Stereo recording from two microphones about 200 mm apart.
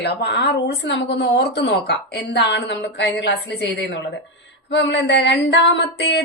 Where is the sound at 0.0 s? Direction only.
55° left (ahead or behind).